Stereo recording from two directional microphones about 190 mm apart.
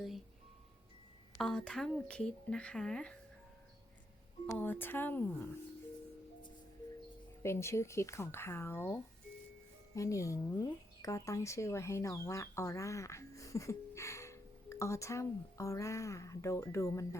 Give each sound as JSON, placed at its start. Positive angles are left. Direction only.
{"t": 1.4, "sound": "speech", "side_deg": 0}
{"t": 4.4, "sound": "speech", "side_deg": 10}
{"t": 7.4, "sound": "speech", "side_deg": 15}